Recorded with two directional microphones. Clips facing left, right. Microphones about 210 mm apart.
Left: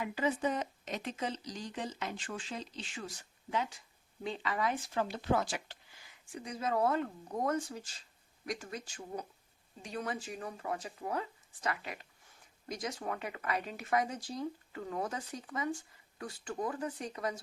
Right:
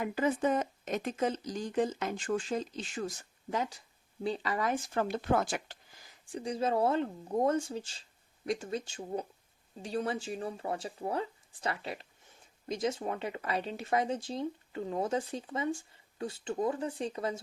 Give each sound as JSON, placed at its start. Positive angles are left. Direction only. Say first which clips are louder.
{"t": 0.0, "sound": "speech", "louder": "right 3 dB", "side_deg": -50}